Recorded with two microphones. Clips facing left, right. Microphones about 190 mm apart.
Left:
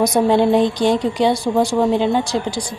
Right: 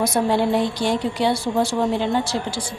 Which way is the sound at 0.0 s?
20° left (ahead or behind).